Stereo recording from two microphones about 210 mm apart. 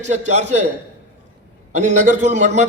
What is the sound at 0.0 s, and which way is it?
Speech, 35° right (ahead or behind).